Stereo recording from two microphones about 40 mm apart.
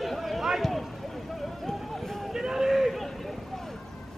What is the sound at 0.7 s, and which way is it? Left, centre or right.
Vehicle, centre.